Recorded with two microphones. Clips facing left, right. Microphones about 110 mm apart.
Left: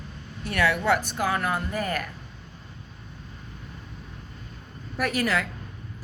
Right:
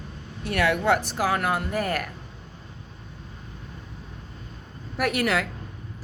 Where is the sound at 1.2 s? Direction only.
75° right (ahead or behind).